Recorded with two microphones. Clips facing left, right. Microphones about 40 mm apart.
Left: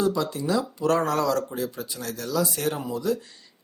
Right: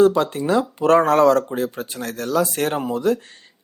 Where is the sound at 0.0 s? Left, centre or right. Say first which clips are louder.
Right 9 dB; right.